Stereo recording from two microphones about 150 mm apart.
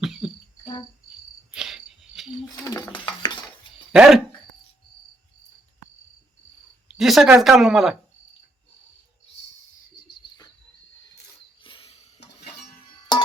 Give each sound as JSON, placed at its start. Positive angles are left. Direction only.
{"t": 0.0, "sound": "cricket", "side_deg": 0}
{"t": 1.5, "sound": "cricket", "side_deg": -5}
{"t": 2.6, "sound": "bird", "side_deg": 20}
{"t": 2.9, "sound": "dishes", "side_deg": 30}
{"t": 3.9, "sound": "speech", "side_deg": -5}
{"t": 6.9, "sound": "a sound", "side_deg": -5}
{"t": 7.3, "sound": "speech", "side_deg": 0}
{"t": 11.6, "sound": "a sound", "side_deg": 35}
{"t": 12.8, "sound": "music", "side_deg": 30}